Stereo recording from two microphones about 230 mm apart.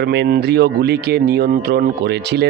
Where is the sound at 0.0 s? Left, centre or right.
Right.